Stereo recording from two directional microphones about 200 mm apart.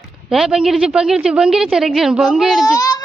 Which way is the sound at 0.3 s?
5° right (ahead or behind).